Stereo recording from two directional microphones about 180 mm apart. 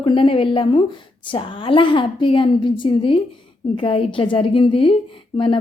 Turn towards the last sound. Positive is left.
turn(degrees=30)  # may be behind; listen again after turning